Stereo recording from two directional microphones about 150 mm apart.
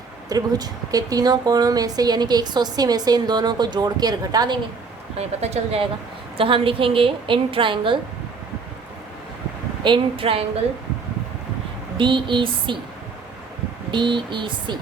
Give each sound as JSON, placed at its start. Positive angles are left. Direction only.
{"t": 0.3, "sound": "speech", "side_deg": -25}
{"t": 5.4, "sound": "a woman's voice", "side_deg": -45}
{"t": 9.8, "sound": "a woman's voice", "side_deg": -35}
{"t": 11.9, "sound": "a woman's voice", "side_deg": -35}
{"t": 13.9, "sound": "a woman's voice", "side_deg": -30}